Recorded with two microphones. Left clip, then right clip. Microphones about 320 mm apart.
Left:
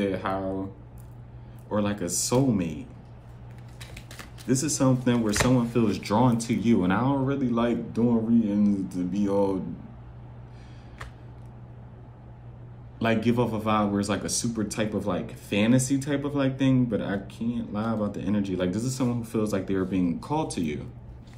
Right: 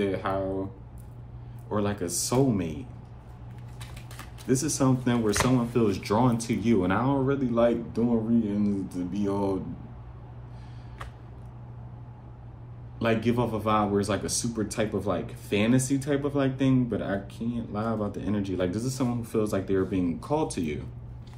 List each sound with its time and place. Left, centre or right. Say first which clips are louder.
0.0 s speech: even; centre
1.7 s speech: left 1 dB; centre
4.5 s speech: left 1 dB; centre
13.0 s speech: left 1 dB; centre